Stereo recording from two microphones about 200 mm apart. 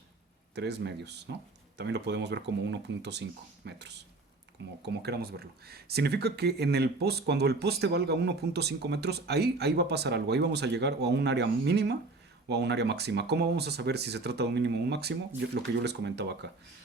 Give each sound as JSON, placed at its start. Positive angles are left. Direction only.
{"t": 0.5, "sound": "speech", "side_deg": -60}